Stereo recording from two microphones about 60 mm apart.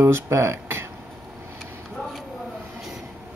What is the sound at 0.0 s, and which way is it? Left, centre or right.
Speech, right.